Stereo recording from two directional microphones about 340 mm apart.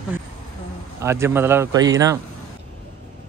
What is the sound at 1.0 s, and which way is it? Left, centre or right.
A man's voice, centre.